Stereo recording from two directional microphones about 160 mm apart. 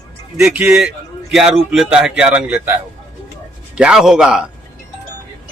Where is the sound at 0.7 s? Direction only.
5° right (ahead or behind).